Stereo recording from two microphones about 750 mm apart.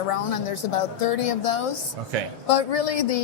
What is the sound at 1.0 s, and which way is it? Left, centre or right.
A woman's voice, left.